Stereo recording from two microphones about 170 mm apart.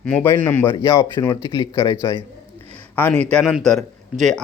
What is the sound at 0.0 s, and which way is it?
A man's voice, 10° left (ahead or behind).